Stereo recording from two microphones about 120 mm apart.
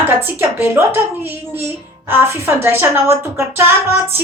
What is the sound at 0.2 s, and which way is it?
A child's voice, 20° right (ahead or behind).